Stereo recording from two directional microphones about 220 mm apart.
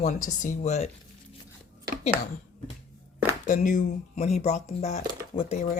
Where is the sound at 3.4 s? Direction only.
35° left (ahead or behind).